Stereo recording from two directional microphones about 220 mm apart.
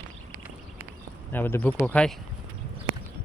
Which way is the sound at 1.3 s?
10° left (ahead or behind).